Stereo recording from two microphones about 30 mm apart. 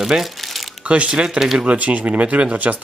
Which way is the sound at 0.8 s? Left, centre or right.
Right.